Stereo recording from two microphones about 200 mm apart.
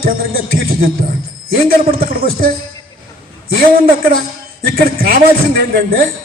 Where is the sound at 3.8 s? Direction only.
50° right (ahead or behind).